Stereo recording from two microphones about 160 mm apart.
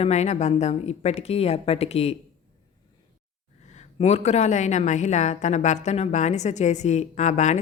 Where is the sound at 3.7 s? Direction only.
45° left (ahead or behind).